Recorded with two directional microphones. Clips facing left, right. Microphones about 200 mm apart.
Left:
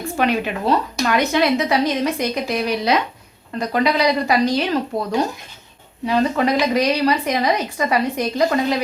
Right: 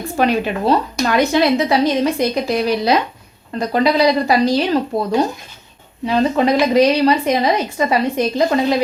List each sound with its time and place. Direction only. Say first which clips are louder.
0.2 s speech: right 4 dB; 35° right (ahead or behind)